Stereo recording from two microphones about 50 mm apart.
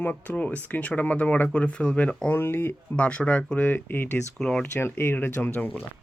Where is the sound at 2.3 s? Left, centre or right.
Left.